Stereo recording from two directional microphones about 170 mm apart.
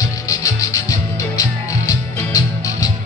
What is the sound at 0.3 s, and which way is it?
Music, 20° left (ahead or behind).